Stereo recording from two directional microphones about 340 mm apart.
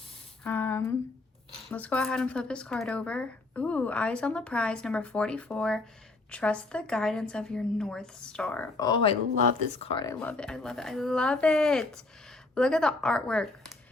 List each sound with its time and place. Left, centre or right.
0.4 s a sound: centre
1.7 s speech: centre
9.3 s speech: right
9.8 s speech: centre